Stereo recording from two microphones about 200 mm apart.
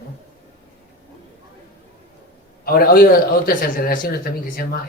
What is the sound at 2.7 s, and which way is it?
Speech, 50° left (ahead or behind).